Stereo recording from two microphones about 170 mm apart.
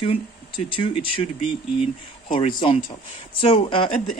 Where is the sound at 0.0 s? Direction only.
30° left (ahead or behind).